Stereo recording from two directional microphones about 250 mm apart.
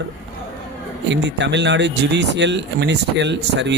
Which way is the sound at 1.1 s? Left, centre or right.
Right.